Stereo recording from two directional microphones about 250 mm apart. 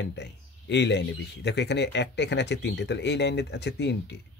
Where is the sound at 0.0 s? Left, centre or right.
Left.